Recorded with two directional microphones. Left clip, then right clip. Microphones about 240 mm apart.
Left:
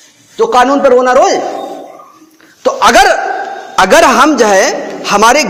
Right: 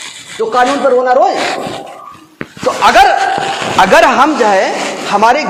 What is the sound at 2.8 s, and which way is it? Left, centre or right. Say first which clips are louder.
A woman's voice: even; left.